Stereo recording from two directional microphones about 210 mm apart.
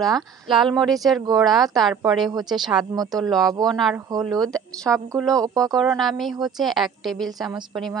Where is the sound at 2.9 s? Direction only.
20° right (ahead or behind).